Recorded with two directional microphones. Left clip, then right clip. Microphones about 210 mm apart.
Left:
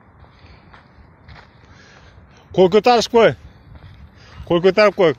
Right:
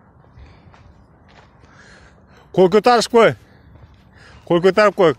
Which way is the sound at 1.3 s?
15° right (ahead or behind).